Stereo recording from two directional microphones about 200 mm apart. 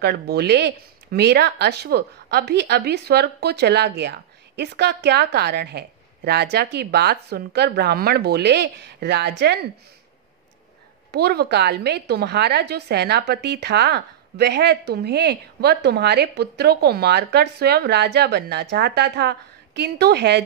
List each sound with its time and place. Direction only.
0.0 s speech: 55° right (ahead or behind)
11.1 s speech: 55° right (ahead or behind)